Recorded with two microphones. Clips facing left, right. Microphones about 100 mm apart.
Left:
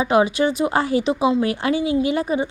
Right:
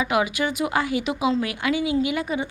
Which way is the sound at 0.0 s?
30° left (ahead or behind).